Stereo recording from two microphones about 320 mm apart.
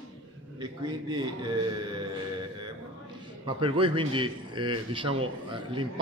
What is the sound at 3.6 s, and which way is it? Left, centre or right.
A man's voice, centre.